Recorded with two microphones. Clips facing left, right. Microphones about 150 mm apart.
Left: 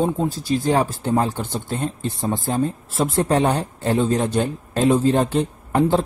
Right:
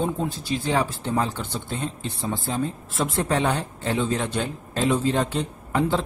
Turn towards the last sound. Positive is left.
turn(degrees=45)  # may be behind; listen again after turning